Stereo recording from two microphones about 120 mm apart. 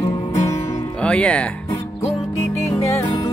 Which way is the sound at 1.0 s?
10° left (ahead or behind).